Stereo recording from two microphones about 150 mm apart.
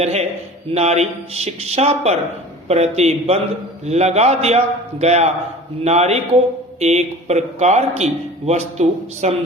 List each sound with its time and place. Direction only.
0.0 s a man's voice: 45° right (ahead or behind)